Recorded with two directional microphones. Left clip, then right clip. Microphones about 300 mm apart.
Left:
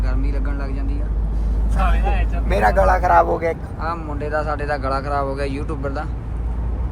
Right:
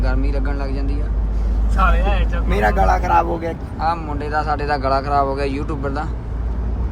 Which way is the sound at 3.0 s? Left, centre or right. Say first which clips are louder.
Left 2 dB; left.